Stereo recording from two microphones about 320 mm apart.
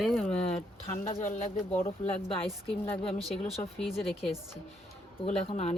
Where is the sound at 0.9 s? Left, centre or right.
Left.